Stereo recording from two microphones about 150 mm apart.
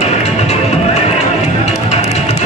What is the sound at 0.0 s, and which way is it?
Music, 45° left (ahead or behind).